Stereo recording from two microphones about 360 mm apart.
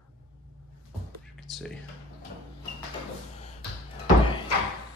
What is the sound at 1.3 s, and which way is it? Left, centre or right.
Music, centre.